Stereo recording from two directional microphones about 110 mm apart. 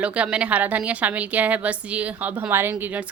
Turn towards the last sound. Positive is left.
turn(degrees=-15)  # may be behind; listen again after turning